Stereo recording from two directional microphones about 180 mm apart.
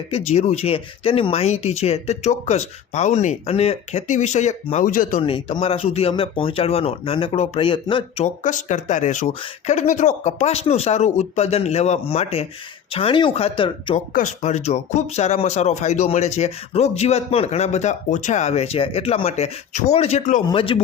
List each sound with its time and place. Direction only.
0.1 s speech: 35° left (ahead or behind)
5.2 s speech: 30° left (ahead or behind)
14.1 s speech: 45° left (ahead or behind)
20.5 s speech: 30° left (ahead or behind)